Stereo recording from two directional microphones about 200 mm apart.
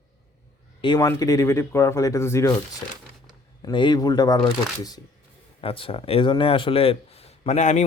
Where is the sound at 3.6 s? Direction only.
25° left (ahead or behind).